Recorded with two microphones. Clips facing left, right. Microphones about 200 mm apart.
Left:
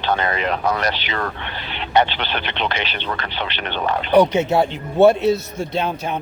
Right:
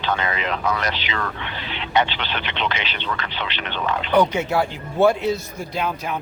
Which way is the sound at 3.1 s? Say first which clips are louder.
Left 2 dB; 45° left (ahead or behind).